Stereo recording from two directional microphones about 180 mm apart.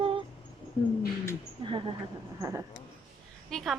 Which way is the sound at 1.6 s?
30° right (ahead or behind).